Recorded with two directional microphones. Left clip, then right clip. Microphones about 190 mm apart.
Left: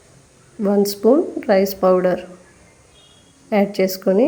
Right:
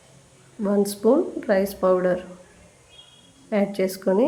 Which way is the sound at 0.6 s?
20° left (ahead or behind).